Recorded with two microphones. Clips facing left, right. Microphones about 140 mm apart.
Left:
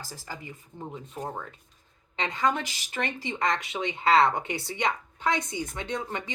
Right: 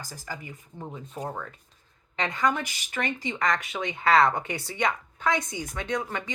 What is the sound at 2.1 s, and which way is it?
A woman's voice, 25° left (ahead or behind).